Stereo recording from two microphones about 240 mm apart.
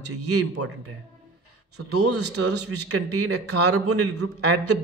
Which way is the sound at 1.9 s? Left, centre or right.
Right.